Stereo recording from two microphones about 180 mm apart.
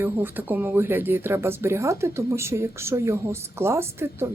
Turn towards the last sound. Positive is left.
turn(degrees=-15)  # may be behind; listen again after turning